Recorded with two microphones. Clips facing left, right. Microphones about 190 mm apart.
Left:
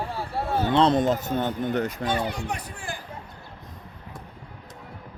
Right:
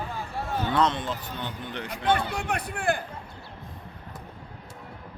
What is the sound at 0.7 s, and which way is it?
Speech, 35° left (ahead or behind).